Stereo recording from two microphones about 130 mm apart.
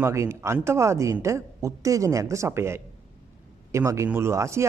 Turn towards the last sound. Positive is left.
turn(degrees=-20)  # may be behind; listen again after turning